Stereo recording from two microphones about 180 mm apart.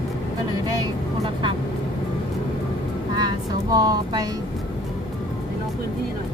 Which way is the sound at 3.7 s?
20° right (ahead or behind).